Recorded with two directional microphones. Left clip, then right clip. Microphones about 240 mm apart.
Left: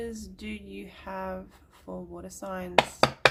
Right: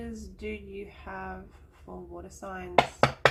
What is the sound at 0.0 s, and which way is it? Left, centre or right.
Speech, left.